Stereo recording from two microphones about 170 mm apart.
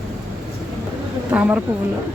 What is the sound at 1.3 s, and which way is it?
Speech, 5° right (ahead or behind).